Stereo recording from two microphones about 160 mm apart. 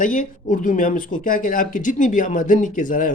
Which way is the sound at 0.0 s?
55° left (ahead or behind).